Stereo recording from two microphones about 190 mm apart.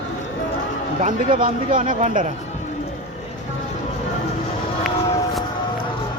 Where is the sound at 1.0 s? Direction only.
40° right (ahead or behind).